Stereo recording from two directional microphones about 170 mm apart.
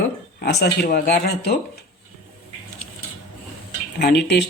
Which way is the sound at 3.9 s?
75° left (ahead or behind).